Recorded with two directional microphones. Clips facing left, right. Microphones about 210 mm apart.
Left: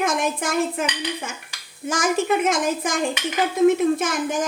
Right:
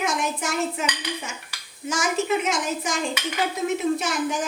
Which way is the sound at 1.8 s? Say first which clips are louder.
Left 3 dB; 50° left (ahead or behind).